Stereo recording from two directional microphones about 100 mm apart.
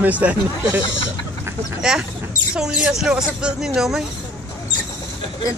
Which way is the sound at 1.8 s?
5° right (ahead or behind).